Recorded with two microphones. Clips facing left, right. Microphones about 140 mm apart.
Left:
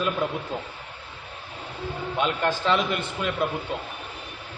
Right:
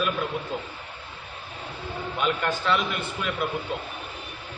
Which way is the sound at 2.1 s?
30° left (ahead or behind).